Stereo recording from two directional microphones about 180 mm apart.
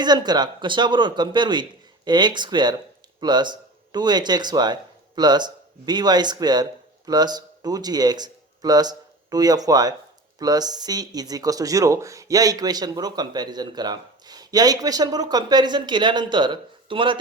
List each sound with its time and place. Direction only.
0.0 s speech: 25° right (ahead or behind)